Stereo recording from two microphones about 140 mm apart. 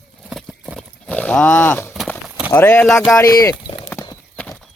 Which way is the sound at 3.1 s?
25° left (ahead or behind).